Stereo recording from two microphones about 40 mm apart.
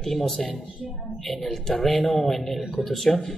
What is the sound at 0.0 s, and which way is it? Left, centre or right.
A man's voice, centre.